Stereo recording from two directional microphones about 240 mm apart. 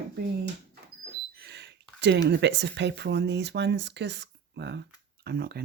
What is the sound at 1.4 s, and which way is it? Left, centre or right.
Speech, right.